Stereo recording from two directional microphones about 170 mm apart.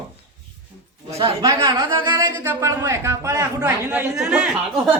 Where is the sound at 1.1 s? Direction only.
25° right (ahead or behind); by 4.4 s 10° right (ahead or behind).